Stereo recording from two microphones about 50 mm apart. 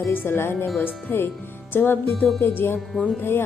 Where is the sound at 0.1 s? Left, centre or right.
Left.